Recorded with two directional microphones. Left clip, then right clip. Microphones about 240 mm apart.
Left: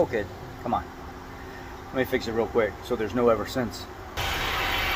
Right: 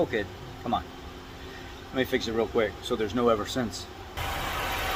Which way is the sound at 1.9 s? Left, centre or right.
Centre.